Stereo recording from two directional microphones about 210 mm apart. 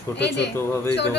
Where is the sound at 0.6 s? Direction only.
10° left (ahead or behind).